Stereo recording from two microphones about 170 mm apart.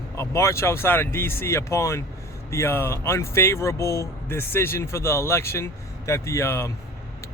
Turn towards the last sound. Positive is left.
turn(degrees=15)  # may be behind; listen again after turning